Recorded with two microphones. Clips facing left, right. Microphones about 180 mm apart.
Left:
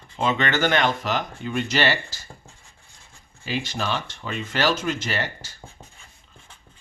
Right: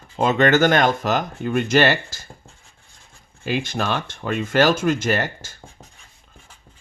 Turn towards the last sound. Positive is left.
turn(degrees=-50)  # may be behind; listen again after turning